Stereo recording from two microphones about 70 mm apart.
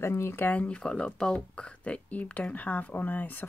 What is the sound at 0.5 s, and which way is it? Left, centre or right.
Speech, centre.